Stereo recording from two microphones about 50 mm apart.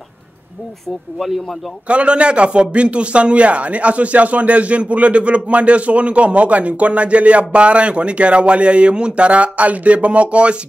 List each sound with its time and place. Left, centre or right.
1.1 s speech: centre
1.9 s a man's voice: right